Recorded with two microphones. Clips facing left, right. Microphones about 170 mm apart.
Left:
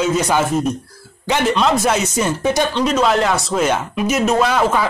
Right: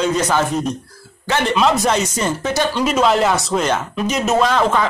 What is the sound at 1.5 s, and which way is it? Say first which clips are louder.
Speech: right 2 dB; centre (ahead or behind).